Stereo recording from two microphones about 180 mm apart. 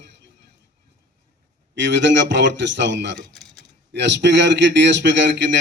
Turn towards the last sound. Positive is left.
turn(degrees=-75)  # may be behind; listen again after turning